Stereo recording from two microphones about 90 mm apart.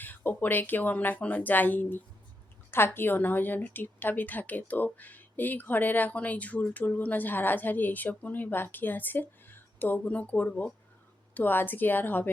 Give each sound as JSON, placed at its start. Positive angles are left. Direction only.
{"t": 0.0, "sound": "a woman's voice", "side_deg": 20}